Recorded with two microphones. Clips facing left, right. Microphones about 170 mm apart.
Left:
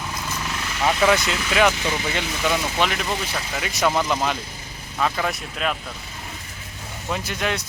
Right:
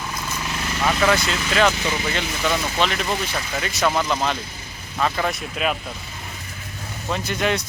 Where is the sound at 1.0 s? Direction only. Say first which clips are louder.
Left 1 dB; 15° left (ahead or behind); by 5.7 s 5° right (ahead or behind).